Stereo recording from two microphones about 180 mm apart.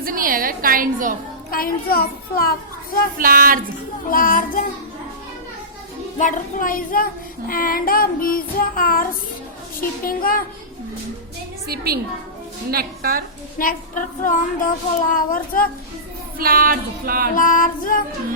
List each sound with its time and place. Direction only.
0.0 s a woman's voice: 50° right (ahead or behind)
1.5 s a child's voice: 55° left (ahead or behind)
3.2 s a woman's voice: 55° right (ahead or behind)
4.1 s speech: 50° left (ahead or behind)
6.1 s speech: 45° left (ahead or behind)
10.1 s speech: 50° left (ahead or behind)
11.7 s a woman's voice: 60° right (ahead or behind)
13.6 s speech: 50° left (ahead or behind)
16.4 s a woman's voice: 55° right (ahead or behind)
17.3 s speech: 50° left (ahead or behind)